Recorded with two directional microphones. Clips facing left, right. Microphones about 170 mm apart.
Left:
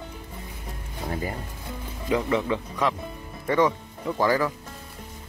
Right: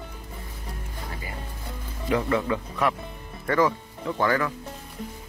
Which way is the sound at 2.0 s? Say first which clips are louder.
Even; 25° left (ahead or behind).